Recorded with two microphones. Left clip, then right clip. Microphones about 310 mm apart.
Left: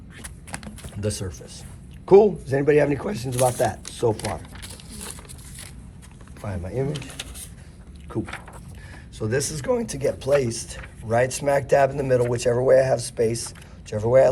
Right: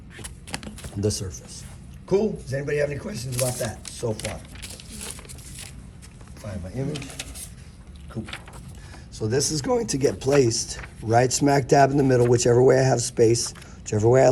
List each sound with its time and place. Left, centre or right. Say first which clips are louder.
0.8 s speech: right 2 dB; centre
2.0 s speech: left 9 dB; centre
6.9 s speech: even; centre
9.1 s a man's voice: right 1 dB; centre; by 14.3 s right